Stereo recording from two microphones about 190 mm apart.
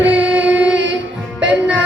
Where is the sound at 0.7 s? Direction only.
70° right (ahead or behind).